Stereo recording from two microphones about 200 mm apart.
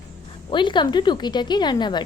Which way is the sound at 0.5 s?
25° left (ahead or behind).